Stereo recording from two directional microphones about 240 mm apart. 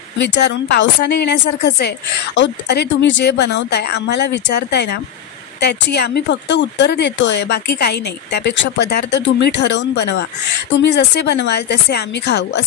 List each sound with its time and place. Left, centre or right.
0.2 s a woman's voice: left